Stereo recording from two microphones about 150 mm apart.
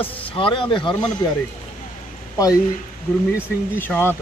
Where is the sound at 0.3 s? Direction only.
35° left (ahead or behind).